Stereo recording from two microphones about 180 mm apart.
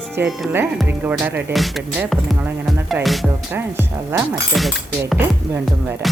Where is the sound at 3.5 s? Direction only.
10° right (ahead or behind).